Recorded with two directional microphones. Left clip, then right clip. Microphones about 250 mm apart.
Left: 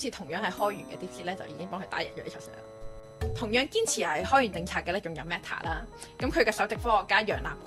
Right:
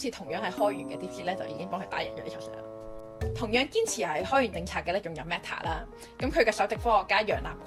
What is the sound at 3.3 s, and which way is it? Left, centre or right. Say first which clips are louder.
A woman's voice: even; left.